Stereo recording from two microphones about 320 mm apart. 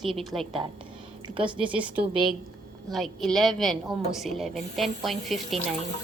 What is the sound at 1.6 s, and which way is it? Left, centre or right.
A woman's voice, centre.